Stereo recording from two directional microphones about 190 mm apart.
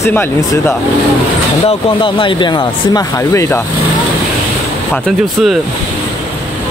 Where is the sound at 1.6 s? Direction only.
25° left (ahead or behind).